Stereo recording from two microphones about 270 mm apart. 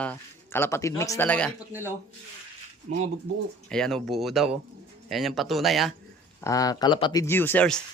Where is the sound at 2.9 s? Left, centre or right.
Right.